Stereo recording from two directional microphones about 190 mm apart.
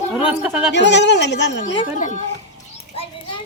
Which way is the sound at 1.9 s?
40° left (ahead or behind).